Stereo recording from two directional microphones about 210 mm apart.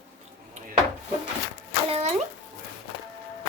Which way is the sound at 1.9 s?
30° right (ahead or behind).